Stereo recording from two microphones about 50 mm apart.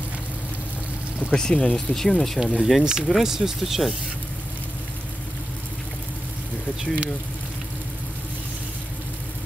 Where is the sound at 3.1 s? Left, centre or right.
Centre.